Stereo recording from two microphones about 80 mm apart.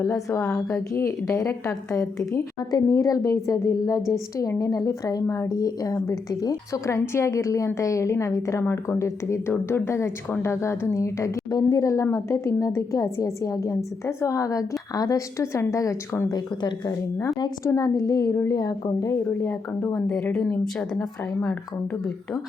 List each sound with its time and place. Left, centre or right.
0.0 s a woman's voice: left
16.3 s speech: left
17.7 s a woman's voice: left
19.0 s speech: left
19.9 s a woman's voice: centre